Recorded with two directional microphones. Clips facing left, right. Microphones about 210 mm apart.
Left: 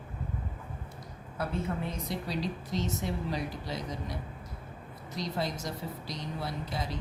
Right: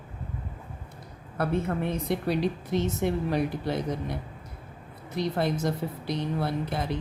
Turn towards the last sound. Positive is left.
turn(degrees=-60)  # may be behind; listen again after turning